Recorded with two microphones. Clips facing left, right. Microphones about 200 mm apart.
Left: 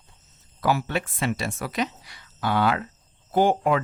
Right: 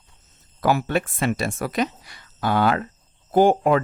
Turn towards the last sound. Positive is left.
turn(degrees=-45)  # may be behind; listen again after turning